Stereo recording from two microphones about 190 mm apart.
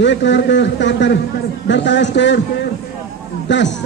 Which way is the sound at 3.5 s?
70° left (ahead or behind).